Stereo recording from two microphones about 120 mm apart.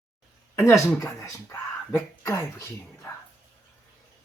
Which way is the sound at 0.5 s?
25° left (ahead or behind).